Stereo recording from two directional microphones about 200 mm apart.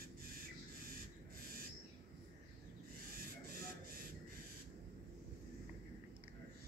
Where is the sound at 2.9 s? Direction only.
45° right (ahead or behind).